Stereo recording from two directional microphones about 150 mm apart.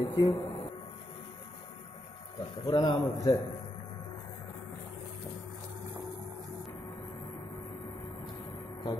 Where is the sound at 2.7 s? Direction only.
30° left (ahead or behind).